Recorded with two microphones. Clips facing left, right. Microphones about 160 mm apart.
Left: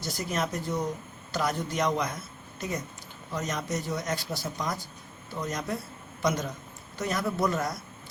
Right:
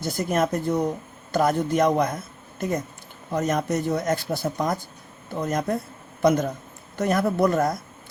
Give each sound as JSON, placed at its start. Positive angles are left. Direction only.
{"t": 0.0, "sound": "speech", "side_deg": -55}